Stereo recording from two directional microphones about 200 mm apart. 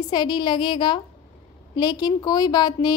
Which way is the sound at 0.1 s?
20° left (ahead or behind).